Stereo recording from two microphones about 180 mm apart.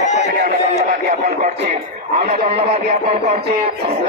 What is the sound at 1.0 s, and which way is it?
A man's voice, 40° right (ahead or behind).